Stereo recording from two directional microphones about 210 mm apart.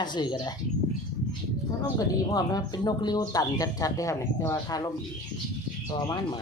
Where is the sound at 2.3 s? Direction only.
20° left (ahead or behind).